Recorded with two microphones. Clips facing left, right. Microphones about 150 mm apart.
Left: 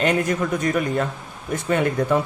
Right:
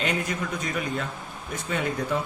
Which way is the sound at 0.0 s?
50° left (ahead or behind).